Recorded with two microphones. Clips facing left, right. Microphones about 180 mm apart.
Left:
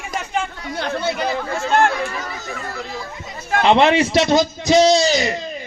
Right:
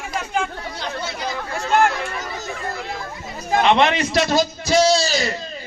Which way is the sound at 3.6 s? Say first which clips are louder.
Left 5 dB; 25° left (ahead or behind).